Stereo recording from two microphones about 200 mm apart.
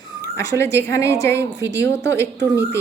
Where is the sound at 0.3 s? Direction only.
15° left (ahead or behind).